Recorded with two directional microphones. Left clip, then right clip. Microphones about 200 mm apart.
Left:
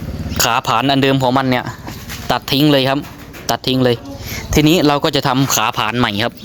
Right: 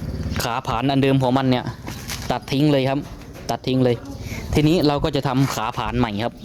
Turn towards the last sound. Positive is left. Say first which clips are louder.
# left 7 dB
turn(degrees=0)  # may be behind; listen again after turning